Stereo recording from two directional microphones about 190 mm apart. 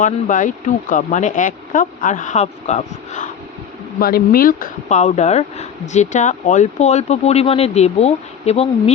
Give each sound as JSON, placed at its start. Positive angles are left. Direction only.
{"t": 0.0, "sound": "speech", "side_deg": 40}
{"t": 4.0, "sound": "speech", "side_deg": 50}